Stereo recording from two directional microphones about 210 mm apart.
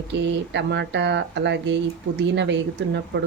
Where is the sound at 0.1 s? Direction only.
55° right (ahead or behind).